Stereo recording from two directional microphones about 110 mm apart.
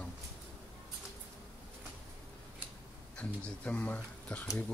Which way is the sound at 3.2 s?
15° left (ahead or behind).